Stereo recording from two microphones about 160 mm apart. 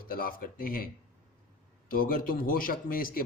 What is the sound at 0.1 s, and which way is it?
Speech, 65° left (ahead or behind).